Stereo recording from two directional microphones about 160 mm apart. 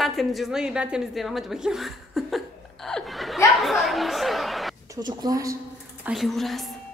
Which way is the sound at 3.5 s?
Centre (ahead or behind).